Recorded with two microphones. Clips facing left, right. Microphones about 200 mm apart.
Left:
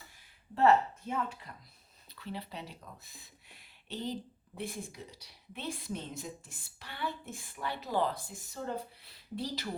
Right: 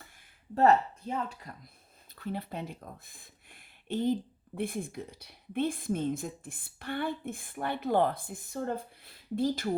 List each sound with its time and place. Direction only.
0.5 s speech: 40° right (ahead or behind)